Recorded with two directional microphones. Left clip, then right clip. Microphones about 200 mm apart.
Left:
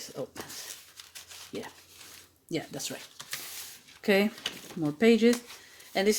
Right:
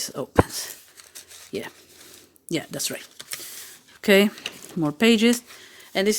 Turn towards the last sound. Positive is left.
turn(degrees=-45)  # may be behind; listen again after turning